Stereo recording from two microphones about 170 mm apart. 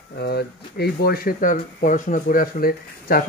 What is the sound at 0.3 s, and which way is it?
Speech, 70° left (ahead or behind).